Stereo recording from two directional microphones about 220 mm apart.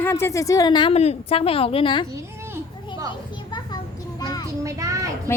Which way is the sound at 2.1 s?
15° right (ahead or behind).